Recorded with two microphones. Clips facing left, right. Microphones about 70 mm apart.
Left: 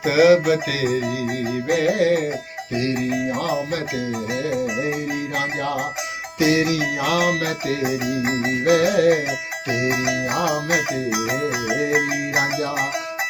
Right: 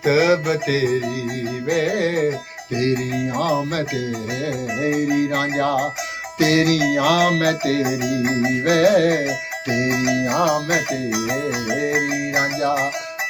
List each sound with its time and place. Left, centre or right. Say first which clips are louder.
0.0 s music: left 2 dB; right
1.7 s music: left 2 dB; right
6.4 s music: right 2 dB; right
8.6 s music: even; right
11.7 s music: even; centre